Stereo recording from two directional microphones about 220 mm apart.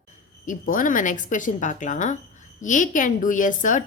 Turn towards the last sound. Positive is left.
turn(degrees=35)  # may be behind; listen again after turning